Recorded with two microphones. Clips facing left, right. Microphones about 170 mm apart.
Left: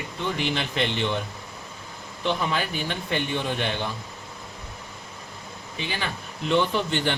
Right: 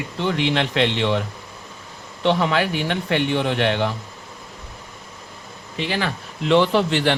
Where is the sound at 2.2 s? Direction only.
80° right.